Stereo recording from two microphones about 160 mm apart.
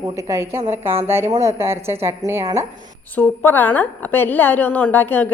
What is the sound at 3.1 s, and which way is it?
A woman's voice, 10° left (ahead or behind).